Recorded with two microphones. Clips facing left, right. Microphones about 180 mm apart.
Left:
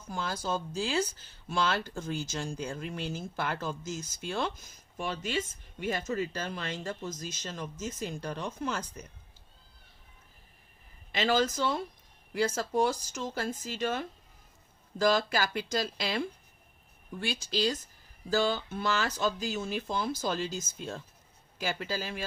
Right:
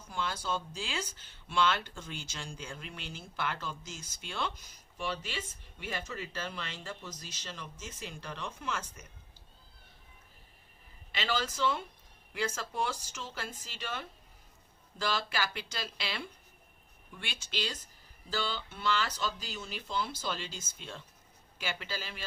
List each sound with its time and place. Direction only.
0.1 s speech: 40° left (ahead or behind)
11.1 s speech: 40° left (ahead or behind)